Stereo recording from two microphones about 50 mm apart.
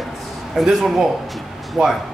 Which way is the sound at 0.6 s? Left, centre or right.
Centre.